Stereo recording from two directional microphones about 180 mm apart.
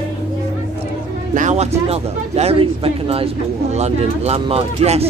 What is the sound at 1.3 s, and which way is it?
Speech, 40° right (ahead or behind).